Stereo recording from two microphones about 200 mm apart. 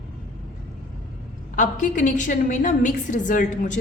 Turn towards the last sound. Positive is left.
turn(degrees=40)  # may be behind; listen again after turning